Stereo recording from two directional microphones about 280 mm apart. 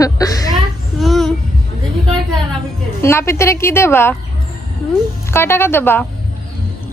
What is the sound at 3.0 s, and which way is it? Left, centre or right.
A woman's voice, centre.